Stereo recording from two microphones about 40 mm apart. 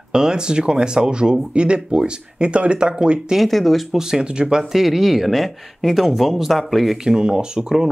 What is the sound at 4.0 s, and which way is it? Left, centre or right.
Speech, centre.